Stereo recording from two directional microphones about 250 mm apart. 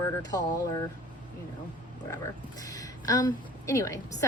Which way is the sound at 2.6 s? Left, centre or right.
Centre.